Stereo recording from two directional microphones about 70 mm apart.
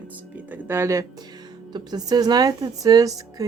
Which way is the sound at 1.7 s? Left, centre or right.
Right.